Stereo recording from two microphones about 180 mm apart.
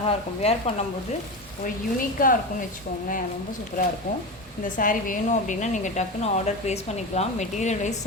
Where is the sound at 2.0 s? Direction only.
50° left (ahead or behind).